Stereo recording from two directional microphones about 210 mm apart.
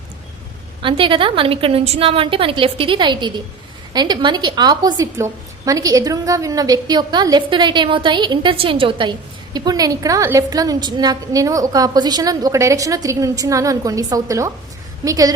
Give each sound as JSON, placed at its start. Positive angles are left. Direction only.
{"t": 0.8, "sound": "a woman's voice", "side_deg": -25}